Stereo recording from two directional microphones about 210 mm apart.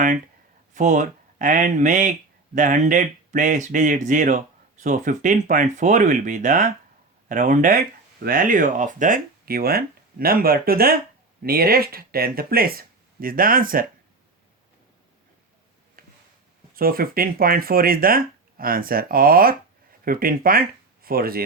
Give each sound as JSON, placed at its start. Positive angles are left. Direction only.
{"t": 0.7, "sound": "speech", "side_deg": -35}
{"t": 16.0, "sound": "a sound", "side_deg": -40}
{"t": 16.7, "sound": "speech", "side_deg": -45}